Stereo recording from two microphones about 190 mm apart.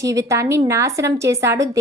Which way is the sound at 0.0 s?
15° right (ahead or behind).